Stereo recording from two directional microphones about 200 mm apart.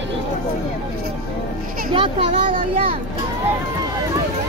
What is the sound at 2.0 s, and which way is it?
Speech, 25° right (ahead or behind).